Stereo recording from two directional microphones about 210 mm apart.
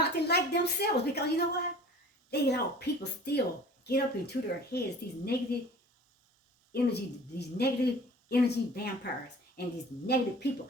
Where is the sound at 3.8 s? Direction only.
50° left (ahead or behind).